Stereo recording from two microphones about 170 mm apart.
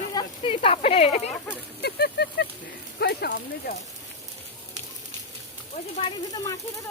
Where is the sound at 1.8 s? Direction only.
70° left (ahead or behind).